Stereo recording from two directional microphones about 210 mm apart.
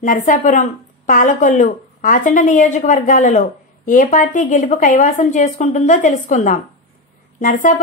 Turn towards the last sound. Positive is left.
turn(degrees=40)  # may be behind; listen again after turning